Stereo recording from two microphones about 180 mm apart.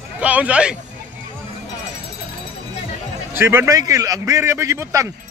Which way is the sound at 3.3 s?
15° right (ahead or behind).